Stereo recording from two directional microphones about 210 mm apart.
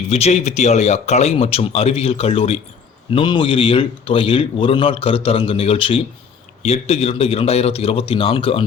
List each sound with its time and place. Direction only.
0.1 s a man's voice: 30° left (ahead or behind)